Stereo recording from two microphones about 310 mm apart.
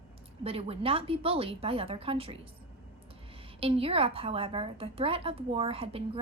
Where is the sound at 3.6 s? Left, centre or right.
Centre.